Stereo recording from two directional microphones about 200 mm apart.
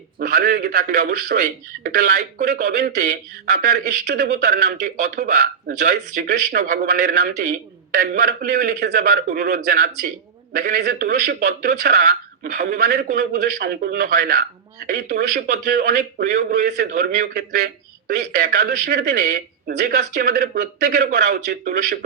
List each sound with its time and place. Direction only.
0.2 s a man's voice: 50° right (ahead or behind)
6.6 s a man's voice: 40° right (ahead or behind)
13.4 s a man's voice: 55° right (ahead or behind)
18.3 s a man's voice: 40° right (ahead or behind)
20.1 s a man's voice: 55° right (ahead or behind)